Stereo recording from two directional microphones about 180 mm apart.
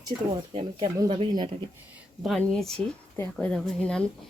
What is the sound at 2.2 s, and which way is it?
Speech, centre (ahead or behind).